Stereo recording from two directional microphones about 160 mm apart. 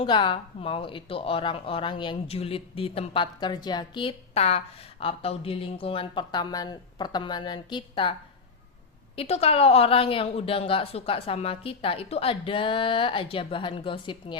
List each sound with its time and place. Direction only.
0.0 s speech: 30° left (ahead or behind)
9.1 s speech: 40° left (ahead or behind)